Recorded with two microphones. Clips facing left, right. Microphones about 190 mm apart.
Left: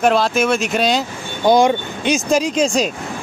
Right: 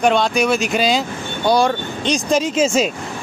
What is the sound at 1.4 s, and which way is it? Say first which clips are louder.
Speech: left 3 dB; 20° left (ahead or behind).